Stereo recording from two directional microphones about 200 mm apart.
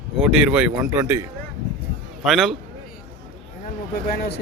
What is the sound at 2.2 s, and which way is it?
Speech, centre (ahead or behind).